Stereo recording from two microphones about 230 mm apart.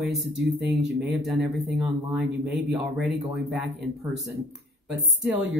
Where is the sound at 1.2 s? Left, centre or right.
Centre.